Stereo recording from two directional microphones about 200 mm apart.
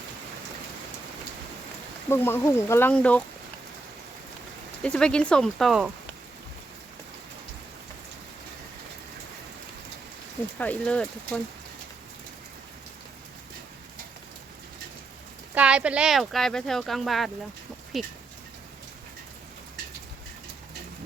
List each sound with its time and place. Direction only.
2.0 s speech: 10° left (ahead or behind)
4.8 s speech: 5° left (ahead or behind)
10.6 s speech: 5° left (ahead or behind)
15.5 s speech: 5° right (ahead or behind)